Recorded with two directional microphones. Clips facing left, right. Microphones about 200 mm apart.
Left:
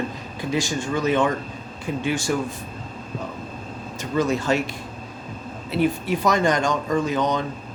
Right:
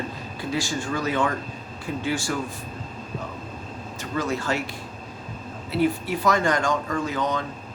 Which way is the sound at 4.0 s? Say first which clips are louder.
Left 5 dB; 20° left (ahead or behind).